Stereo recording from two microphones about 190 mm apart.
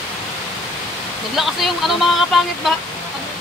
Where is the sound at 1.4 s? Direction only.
Centre (ahead or behind).